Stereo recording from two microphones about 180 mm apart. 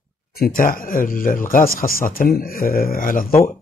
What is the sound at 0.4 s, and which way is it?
A man's voice, 50° left (ahead or behind).